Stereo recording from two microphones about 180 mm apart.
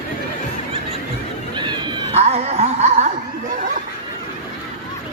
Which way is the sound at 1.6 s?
25° right (ahead or behind).